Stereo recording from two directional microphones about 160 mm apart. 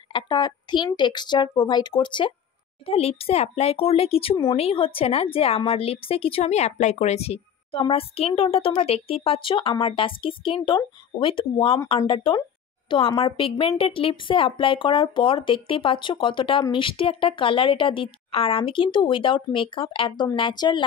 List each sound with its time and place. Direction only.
0.1 s a woman's voice: 25° left (ahead or behind)